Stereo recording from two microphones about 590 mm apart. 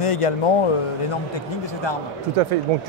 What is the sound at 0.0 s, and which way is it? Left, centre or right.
Speech, left.